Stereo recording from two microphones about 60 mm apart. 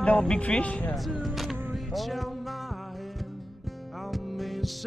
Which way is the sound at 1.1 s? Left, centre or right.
Centre.